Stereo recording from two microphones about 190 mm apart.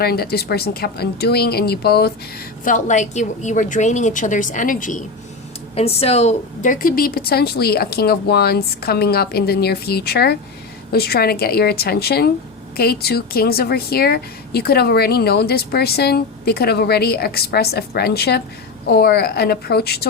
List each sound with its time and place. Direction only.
0.0 s a woman's voice: 55° left (ahead or behind)
2.6 s a woman's voice: 40° left (ahead or behind)
5.7 s a woman's voice: 30° left (ahead or behind); by 20.1 s 55° left (ahead or behind)